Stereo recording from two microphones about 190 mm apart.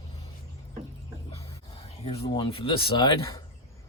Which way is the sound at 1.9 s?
30° left (ahead or behind).